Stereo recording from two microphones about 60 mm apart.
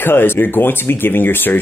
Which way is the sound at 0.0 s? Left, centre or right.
Left.